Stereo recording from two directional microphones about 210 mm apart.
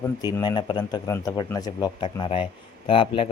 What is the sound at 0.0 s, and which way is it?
Speech, 15° left (ahead or behind).